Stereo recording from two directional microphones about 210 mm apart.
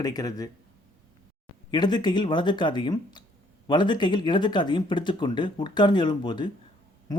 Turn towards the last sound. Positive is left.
turn(degrees=20)  # may be behind; listen again after turning